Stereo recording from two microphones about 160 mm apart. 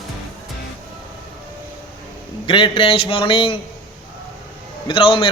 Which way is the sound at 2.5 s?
35° left (ahead or behind).